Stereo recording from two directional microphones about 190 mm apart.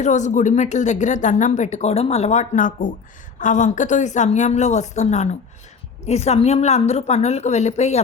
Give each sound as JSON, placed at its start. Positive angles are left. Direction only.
{"t": 0.0, "sound": "speech", "side_deg": 40}